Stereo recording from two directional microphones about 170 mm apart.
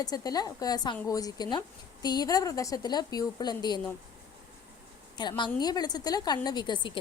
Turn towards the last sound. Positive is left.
turn(degrees=25)  # may be behind; listen again after turning